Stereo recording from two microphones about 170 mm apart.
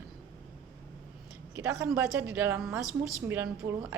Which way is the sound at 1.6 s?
15° right (ahead or behind).